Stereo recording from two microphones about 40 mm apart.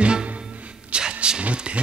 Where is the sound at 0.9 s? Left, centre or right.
Right.